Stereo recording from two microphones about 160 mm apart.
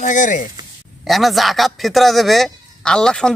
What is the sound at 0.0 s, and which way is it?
Speech, 55° left (ahead or behind).